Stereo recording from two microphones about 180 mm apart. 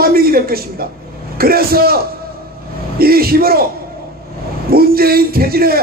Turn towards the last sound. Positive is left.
turn(degrees=-55)  # may be behind; listen again after turning